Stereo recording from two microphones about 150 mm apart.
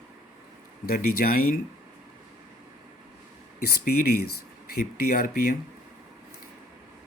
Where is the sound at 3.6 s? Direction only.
90° left.